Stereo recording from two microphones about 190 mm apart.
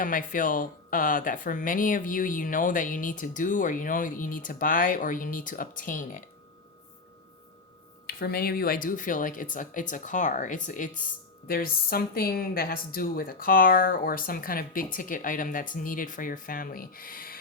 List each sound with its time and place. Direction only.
0.0 s speech: 45° left (ahead or behind)
8.0 s speech: 55° left (ahead or behind)